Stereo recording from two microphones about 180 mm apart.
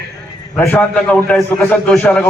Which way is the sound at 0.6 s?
10° left (ahead or behind).